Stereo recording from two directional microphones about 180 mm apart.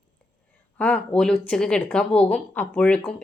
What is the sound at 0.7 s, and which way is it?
Speech, 10° left (ahead or behind).